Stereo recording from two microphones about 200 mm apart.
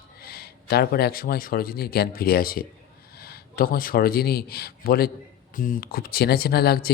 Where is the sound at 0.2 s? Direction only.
50° left (ahead or behind).